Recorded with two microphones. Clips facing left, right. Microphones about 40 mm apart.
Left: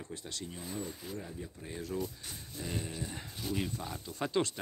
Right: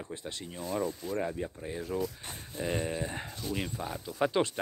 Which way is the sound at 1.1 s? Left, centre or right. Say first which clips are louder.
Right 10 dB; right.